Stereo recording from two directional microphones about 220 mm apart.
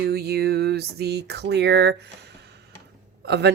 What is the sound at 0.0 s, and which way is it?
Speech, 45° right (ahead or behind).